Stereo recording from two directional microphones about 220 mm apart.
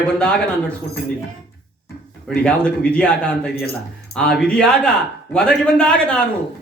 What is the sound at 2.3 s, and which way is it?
Speech, 5° left (ahead or behind).